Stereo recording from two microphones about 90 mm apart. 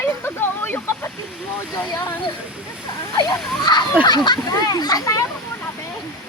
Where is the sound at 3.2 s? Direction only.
50° left (ahead or behind).